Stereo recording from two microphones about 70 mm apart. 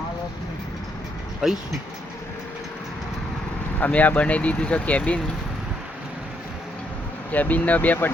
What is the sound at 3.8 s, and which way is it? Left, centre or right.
Speech, left.